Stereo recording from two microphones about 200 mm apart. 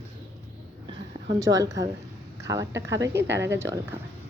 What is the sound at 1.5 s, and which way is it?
Speech, 15° right (ahead or behind).